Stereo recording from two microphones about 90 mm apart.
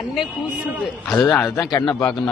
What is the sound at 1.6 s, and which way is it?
Speech, 50° left (ahead or behind).